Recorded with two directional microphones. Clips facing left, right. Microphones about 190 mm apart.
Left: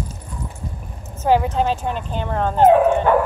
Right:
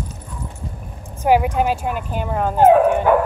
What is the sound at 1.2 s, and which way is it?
Speech, 10° right (ahead or behind).